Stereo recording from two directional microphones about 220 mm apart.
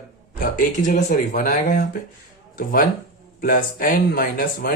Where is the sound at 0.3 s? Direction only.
35° left (ahead or behind).